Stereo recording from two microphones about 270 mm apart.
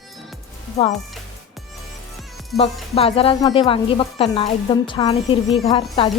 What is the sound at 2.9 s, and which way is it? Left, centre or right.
A woman's voice, left.